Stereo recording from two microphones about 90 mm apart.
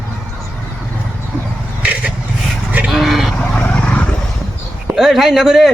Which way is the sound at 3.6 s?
15° left (ahead or behind).